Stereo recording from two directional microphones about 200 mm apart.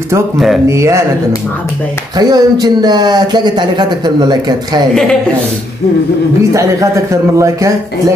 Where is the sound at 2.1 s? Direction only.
20° right (ahead or behind).